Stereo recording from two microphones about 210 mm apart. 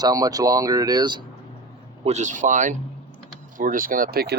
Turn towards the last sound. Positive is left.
turn(degrees=-45)  # may be behind; listen again after turning